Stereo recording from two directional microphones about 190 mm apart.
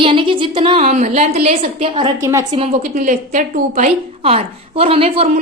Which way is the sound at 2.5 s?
35° right (ahead or behind).